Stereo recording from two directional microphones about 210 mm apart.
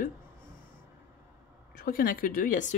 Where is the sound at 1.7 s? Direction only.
45° left (ahead or behind).